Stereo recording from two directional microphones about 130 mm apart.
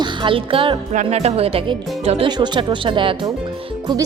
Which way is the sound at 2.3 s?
35° right (ahead or behind).